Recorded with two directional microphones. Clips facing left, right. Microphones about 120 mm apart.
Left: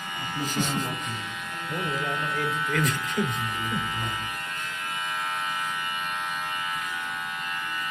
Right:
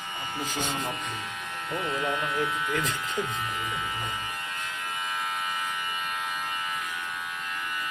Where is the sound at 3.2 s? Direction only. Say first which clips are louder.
Left 4 dB; 35° right (ahead or behind).